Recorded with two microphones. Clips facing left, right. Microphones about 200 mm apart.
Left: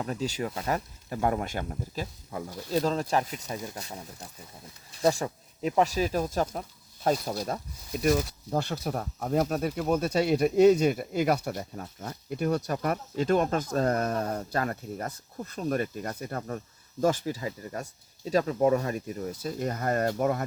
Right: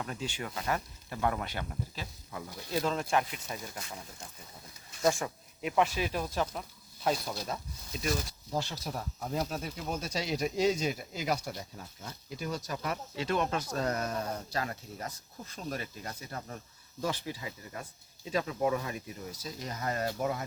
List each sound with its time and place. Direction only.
0.0 s speech: 35° left (ahead or behind); by 20.4 s 55° left (ahead or behind)